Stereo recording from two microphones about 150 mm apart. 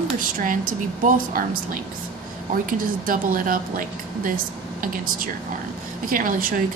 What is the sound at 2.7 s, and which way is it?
A woman's voice, 65° right (ahead or behind).